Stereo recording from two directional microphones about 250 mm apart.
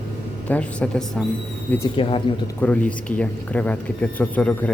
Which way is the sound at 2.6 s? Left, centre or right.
Centre.